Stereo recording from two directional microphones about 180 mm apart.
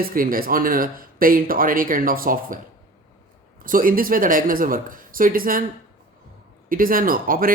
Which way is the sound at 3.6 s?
50° right (ahead or behind).